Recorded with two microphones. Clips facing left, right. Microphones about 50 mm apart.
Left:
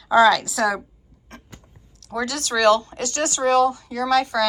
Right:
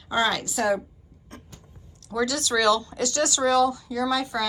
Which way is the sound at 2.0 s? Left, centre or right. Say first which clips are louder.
Right 1 dB; left.